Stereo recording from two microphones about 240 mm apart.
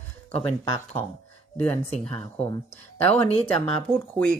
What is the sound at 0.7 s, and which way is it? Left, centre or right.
Speech, centre.